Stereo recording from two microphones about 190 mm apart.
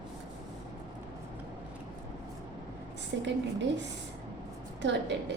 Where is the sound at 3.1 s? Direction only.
70° right (ahead or behind).